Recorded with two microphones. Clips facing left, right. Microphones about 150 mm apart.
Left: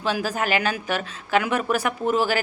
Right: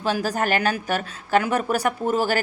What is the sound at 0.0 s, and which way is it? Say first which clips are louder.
A woman's voice: right 1 dB; 45° right (ahead or behind).